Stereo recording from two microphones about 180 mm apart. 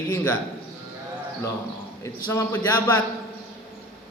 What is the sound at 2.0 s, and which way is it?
A man's voice, 15° left (ahead or behind).